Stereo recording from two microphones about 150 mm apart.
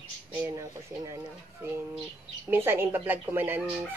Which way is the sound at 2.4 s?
15° right (ahead or behind).